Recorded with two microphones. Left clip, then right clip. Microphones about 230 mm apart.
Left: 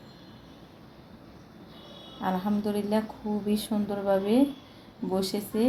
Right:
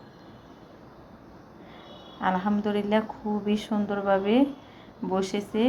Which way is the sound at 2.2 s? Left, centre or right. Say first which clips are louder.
Right 4 dB; centre.